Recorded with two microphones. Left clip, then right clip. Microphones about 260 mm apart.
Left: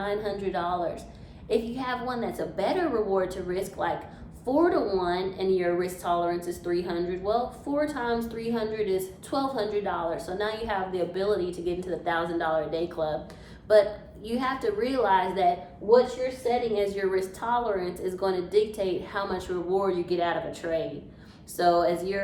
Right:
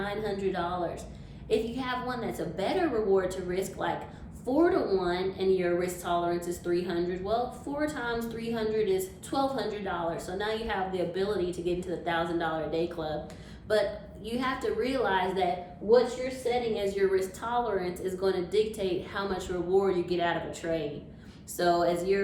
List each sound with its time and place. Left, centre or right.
0.0 s a woman's voice: centre
16.7 s a woman's voice: left